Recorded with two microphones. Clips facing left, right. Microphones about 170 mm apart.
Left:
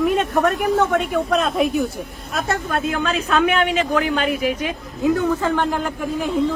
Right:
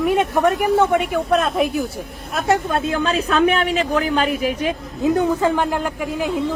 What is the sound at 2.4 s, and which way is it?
Speech, 15° right (ahead or behind).